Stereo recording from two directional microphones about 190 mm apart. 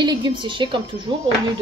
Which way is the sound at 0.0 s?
25° right (ahead or behind).